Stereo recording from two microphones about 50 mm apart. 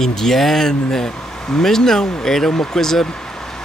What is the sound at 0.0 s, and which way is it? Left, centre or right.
Speech, centre.